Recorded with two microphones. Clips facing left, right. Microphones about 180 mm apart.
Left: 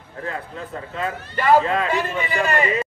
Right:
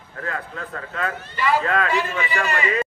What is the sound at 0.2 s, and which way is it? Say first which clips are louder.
Speech: even; 25° left (ahead or behind).